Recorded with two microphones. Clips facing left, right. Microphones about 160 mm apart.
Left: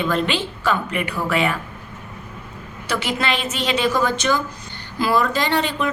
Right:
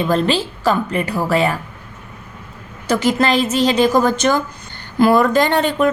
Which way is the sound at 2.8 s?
45° right (ahead or behind).